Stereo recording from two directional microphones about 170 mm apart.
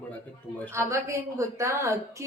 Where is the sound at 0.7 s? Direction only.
15° right (ahead or behind).